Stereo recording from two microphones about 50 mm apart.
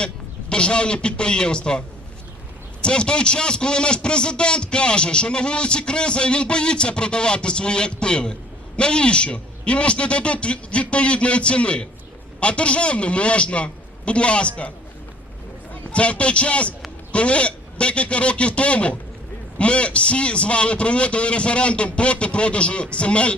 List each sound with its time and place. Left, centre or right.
0.5 s a man's voice: centre
2.8 s a man's voice: centre
15.9 s a man's voice: left